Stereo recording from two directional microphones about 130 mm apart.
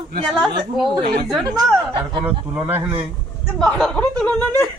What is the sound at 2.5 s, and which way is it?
Speech, 15° right (ahead or behind).